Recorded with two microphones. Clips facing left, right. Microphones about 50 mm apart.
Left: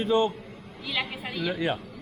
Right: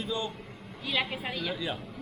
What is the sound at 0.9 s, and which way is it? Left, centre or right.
Speech, centre.